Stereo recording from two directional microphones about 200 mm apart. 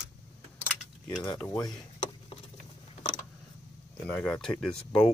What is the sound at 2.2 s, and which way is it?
Patter, 35° left (ahead or behind).